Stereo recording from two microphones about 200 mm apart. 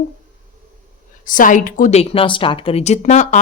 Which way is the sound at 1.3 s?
40° left (ahead or behind).